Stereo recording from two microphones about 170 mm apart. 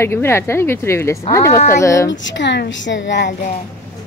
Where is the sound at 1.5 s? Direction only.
55° left (ahead or behind).